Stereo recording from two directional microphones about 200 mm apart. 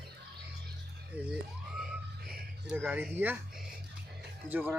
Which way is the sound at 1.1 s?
10° right (ahead or behind).